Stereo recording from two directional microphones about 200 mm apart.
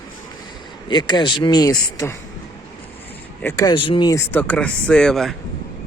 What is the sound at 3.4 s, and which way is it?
Speech, 15° left (ahead or behind).